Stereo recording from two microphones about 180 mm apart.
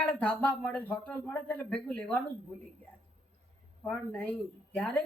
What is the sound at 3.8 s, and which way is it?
Speech, 5° left (ahead or behind).